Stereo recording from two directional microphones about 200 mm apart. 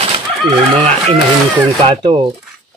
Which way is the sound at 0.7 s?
35° right (ahead or behind).